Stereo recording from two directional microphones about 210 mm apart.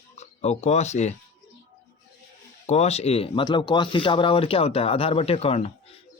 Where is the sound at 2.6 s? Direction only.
30° left (ahead or behind).